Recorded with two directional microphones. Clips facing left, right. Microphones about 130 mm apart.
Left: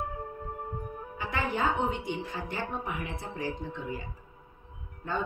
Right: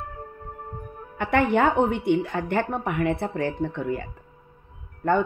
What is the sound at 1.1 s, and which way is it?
A woman's voice, 65° right (ahead or behind).